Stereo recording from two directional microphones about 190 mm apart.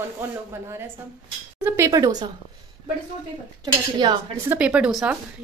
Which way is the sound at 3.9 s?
20° right (ahead or behind).